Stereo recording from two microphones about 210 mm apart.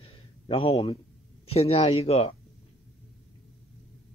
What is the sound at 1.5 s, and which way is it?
Speech, 30° left (ahead or behind).